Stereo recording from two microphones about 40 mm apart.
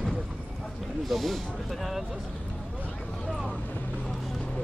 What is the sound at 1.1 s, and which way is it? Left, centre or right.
Speech, centre.